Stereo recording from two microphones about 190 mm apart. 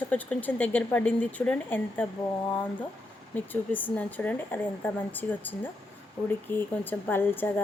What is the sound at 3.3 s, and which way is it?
Speech, 10° left (ahead or behind).